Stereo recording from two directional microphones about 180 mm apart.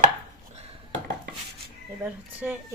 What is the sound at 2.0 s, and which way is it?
Speech, 5° right (ahead or behind).